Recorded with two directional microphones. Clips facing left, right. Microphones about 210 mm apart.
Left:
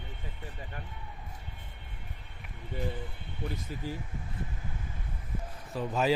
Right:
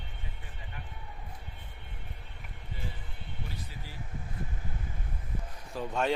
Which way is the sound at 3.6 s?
45° left (ahead or behind).